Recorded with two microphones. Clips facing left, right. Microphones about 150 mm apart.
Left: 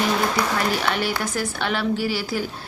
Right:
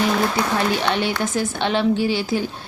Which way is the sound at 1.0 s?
25° right (ahead or behind).